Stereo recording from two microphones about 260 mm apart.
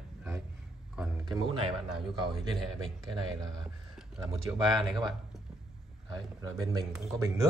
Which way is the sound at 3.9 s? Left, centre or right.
Centre.